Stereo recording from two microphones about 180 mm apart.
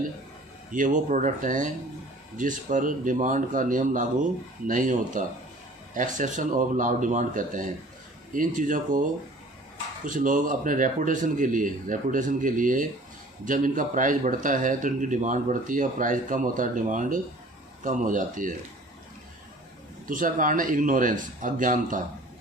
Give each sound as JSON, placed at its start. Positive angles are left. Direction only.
{"t": 0.7, "sound": "a man's voice", "side_deg": -45}
{"t": 20.1, "sound": "a man's voice", "side_deg": -50}